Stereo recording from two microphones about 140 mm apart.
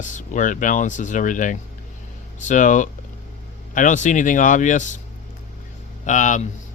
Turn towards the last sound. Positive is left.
turn(degrees=65)  # may be behind; listen again after turning